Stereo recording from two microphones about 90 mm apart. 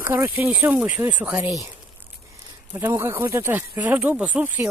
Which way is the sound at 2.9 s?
25° right (ahead or behind).